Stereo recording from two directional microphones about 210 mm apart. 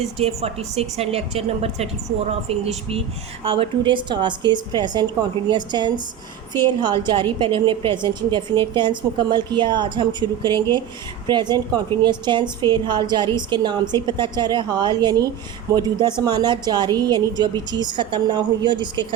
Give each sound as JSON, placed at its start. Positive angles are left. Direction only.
{"t": 0.2, "sound": "a woman's voice", "side_deg": -30}